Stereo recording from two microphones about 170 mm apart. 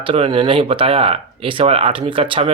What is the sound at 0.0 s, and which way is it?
Speech, 30° right (ahead or behind).